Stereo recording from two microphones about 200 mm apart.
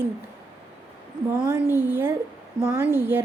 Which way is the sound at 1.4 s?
10° right (ahead or behind).